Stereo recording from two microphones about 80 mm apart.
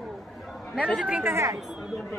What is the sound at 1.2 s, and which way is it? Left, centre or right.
Speech, right.